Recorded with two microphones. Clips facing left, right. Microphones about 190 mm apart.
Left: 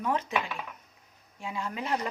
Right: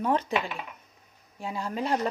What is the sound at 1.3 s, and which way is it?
Speech, 35° right (ahead or behind).